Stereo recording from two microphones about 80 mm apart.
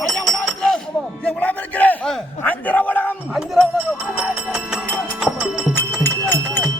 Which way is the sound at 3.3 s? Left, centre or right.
Centre.